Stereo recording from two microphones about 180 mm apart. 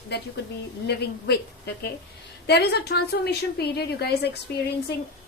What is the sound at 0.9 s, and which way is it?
A woman's voice, 65° left (ahead or behind).